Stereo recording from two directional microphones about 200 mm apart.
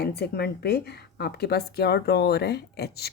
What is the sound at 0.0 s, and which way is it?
Speech, 55° left (ahead or behind).